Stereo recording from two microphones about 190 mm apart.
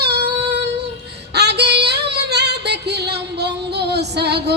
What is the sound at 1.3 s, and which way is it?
Female singing, 60° right (ahead or behind).